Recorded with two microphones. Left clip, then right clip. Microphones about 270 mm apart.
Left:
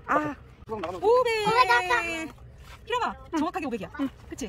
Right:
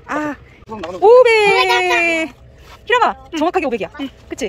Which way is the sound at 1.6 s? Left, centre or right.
Left.